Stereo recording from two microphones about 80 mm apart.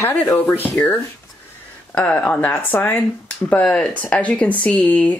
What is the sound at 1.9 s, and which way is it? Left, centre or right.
Speech, centre.